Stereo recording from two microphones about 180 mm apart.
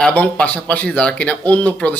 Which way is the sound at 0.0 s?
5° left (ahead or behind).